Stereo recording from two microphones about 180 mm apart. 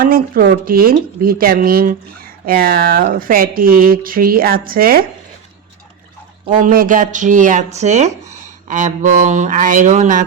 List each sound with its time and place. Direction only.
0.0 s speech: 55° right (ahead or behind)
6.5 s speech: 50° right (ahead or behind)